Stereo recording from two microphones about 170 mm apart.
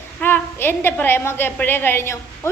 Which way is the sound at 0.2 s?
10° left (ahead or behind).